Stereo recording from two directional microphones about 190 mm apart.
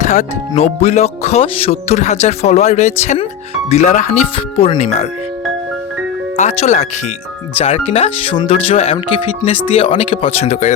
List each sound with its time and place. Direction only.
0.0 s music: 40° left (ahead or behind)
6.3 s music: 40° left (ahead or behind)